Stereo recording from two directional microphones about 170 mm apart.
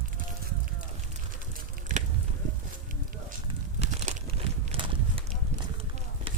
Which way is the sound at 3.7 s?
35° right (ahead or behind).